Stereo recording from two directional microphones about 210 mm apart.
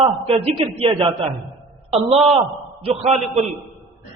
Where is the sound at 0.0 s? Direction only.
25° right (ahead or behind).